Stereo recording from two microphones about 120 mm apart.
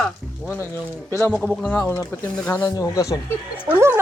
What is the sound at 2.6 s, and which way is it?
Speech, 30° left (ahead or behind).